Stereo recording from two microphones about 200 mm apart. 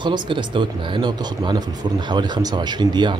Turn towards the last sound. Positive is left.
turn(degrees=-20)  # may be behind; listen again after turning